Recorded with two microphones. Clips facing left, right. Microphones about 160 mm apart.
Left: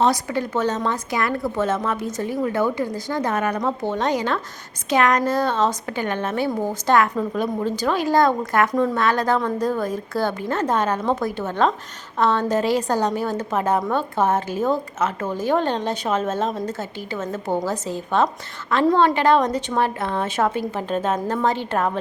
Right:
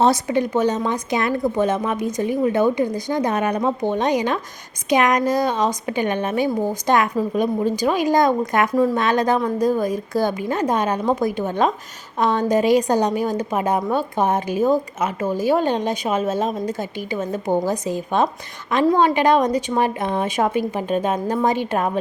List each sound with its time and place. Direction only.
0.0 s a woman's voice: 25° right (ahead or behind)